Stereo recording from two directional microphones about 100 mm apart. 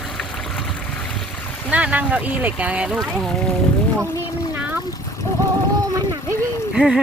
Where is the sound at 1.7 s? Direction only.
15° right (ahead or behind).